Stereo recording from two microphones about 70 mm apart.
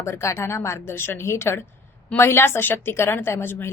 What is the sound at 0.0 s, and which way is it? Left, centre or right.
A woman's voice, left.